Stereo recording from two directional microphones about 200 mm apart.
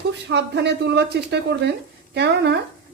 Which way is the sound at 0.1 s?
60° right (ahead or behind).